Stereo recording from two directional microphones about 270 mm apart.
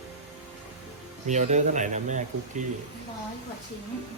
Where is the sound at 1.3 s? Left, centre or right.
Right.